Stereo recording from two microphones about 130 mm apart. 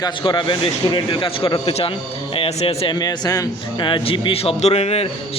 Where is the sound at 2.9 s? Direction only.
30° left (ahead or behind); by 5.1 s 50° left (ahead or behind).